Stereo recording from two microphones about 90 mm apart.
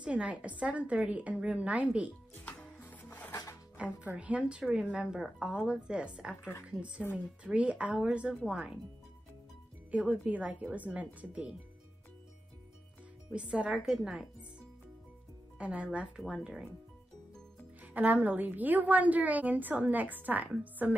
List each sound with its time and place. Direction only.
0.0 s a woman's voice: 10° right (ahead or behind)
2.3 s music: 20° left (ahead or behind)
3.7 s a woman's voice: 15° right (ahead or behind)
9.8 s a woman's voice: 15° right (ahead or behind)
13.3 s a woman's voice: 10° right (ahead or behind)
15.5 s a woman's voice: 10° right (ahead or behind)
17.9 s a woman's voice: 20° right (ahead or behind)